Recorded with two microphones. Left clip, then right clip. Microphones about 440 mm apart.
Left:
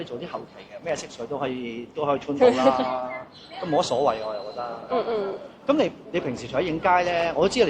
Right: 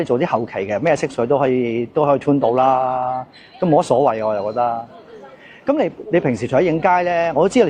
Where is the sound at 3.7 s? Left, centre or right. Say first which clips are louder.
Right 7 dB; right.